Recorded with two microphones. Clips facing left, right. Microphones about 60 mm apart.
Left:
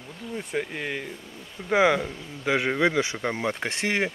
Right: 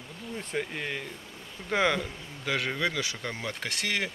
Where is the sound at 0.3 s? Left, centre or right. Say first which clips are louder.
Left 3 dB; centre.